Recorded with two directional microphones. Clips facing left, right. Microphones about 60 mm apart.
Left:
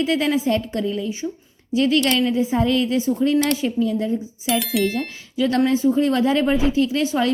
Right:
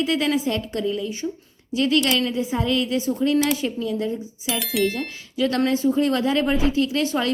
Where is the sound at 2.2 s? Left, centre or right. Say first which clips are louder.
Left 4 dB; centre.